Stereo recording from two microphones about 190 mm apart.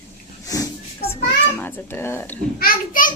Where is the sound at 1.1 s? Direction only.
10° left (ahead or behind).